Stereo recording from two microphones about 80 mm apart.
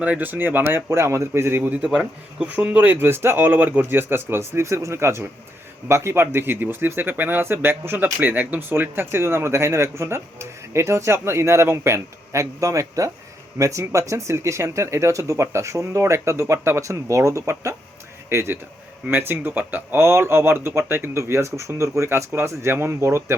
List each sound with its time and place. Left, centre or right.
0.0 s speech: centre
1.7 s speech: centre; by 23.2 s right